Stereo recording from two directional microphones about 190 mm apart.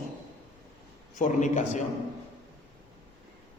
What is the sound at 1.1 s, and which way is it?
Speech, 40° left (ahead or behind).